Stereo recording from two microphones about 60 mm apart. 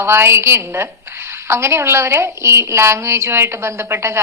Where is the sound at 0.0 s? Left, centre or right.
Right.